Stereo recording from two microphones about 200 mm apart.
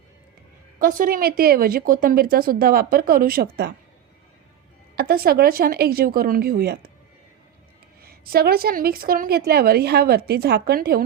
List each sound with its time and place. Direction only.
0.8 s a woman's voice: 45° right (ahead or behind)
4.9 s a woman's voice: 50° right (ahead or behind)
8.0 s a woman's voice: 50° right (ahead or behind)